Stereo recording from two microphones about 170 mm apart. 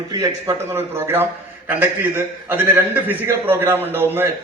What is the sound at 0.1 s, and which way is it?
A man's voice, 20° right (ahead or behind).